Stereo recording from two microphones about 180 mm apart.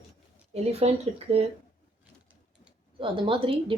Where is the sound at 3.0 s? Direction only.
30° right (ahead or behind).